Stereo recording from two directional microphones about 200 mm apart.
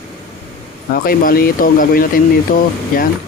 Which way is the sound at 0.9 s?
45° left (ahead or behind).